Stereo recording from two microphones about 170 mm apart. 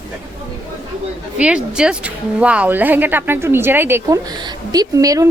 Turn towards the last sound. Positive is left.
turn(degrees=-20)  # may be behind; listen again after turning